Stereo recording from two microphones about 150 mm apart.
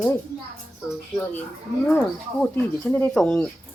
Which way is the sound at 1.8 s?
10° left (ahead or behind).